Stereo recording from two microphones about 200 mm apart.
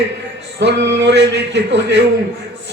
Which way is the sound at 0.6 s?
60° right (ahead or behind).